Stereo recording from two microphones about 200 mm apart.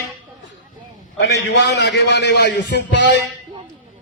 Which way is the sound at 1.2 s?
60° left (ahead or behind).